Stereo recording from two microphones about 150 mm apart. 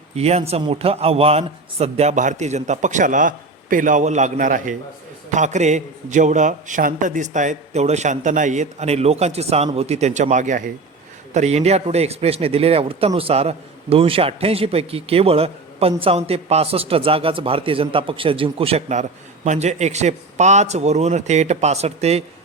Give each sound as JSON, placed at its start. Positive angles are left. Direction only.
{"t": 0.2, "sound": "a man's voice", "side_deg": -45}
{"t": 11.3, "sound": "a man's voice", "side_deg": -45}